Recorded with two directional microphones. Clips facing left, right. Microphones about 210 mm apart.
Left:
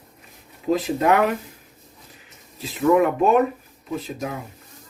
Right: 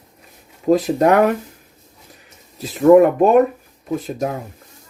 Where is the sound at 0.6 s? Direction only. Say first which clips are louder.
Right 5 dB; 45° right (ahead or behind).